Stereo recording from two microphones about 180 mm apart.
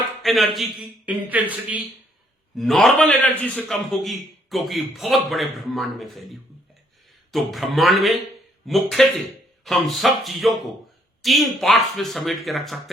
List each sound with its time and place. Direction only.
0.2 s a man's voice: centre (ahead or behind)
7.3 s a man's voice: centre (ahead or behind)